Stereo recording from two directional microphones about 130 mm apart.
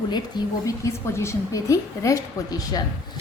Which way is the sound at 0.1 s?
30° left (ahead or behind).